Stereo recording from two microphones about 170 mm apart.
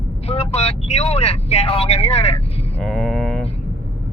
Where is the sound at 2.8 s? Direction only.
5° left (ahead or behind).